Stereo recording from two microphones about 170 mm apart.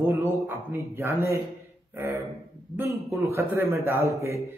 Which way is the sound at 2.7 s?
15° right (ahead or behind).